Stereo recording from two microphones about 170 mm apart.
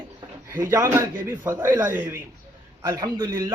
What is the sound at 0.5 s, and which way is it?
A man's voice, 15° right (ahead or behind).